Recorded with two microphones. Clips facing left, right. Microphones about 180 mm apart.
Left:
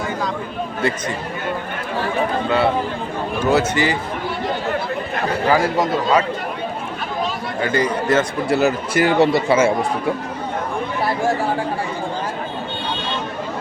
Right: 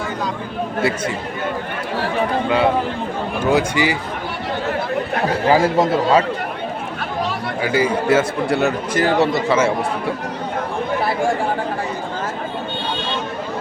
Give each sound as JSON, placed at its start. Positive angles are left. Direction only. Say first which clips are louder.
{"t": 0.8, "sound": "a man's voice", "louder": "right 2 dB", "side_deg": -5}
{"t": 2.5, "sound": "a man's voice", "louder": "right 1 dB", "side_deg": -15}
{"t": 5.5, "sound": "speech", "louder": "right 3 dB", "side_deg": -25}
{"t": 7.6, "sound": "a man's voice", "louder": "right 1 dB", "side_deg": -5}